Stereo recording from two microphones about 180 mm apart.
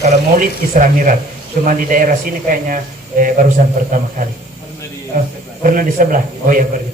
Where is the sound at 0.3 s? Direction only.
45° right (ahead or behind).